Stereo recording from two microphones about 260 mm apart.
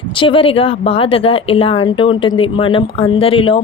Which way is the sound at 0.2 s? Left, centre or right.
Centre.